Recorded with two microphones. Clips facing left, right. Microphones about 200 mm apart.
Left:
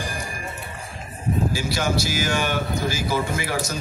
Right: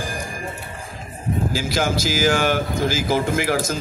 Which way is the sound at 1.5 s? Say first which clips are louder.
Right 2 dB; 90° right.